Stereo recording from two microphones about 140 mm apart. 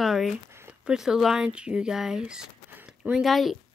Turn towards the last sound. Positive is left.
turn(degrees=0)  # may be behind; listen again after turning